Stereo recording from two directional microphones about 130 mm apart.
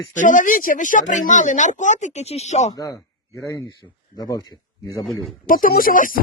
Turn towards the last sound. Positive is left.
turn(degrees=90)